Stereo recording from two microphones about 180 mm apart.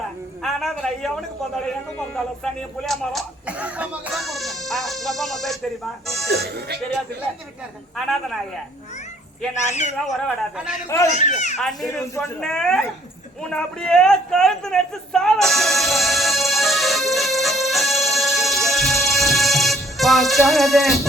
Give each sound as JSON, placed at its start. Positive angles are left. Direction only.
{"t": 0.4, "sound": "a man's voice", "side_deg": 0}
{"t": 6.3, "sound": "speech", "side_deg": -60}
{"t": 7.9, "sound": "a man's voice", "side_deg": 0}
{"t": 9.6, "sound": "a child's voice", "side_deg": 40}
{"t": 10.1, "sound": "a man's voice", "side_deg": 0}
{"t": 10.8, "sound": "a child's voice", "side_deg": 15}
{"t": 11.1, "sound": "a child's voice", "side_deg": 40}
{"t": 12.4, "sound": "a man's voice", "side_deg": 5}
{"t": 13.4, "sound": "a sound", "side_deg": 5}